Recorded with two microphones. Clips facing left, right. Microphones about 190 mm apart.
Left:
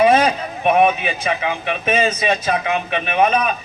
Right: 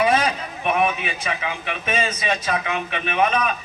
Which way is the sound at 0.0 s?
35° left (ahead or behind).